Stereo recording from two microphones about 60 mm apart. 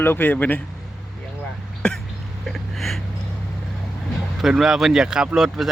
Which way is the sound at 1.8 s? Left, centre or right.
Centre.